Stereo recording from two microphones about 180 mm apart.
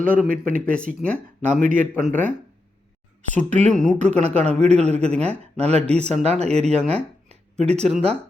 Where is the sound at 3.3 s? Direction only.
40° right (ahead or behind).